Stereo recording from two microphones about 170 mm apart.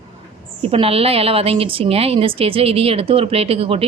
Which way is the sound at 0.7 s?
35° right (ahead or behind).